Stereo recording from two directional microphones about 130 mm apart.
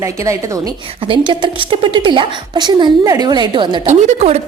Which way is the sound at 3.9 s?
60° right (ahead or behind).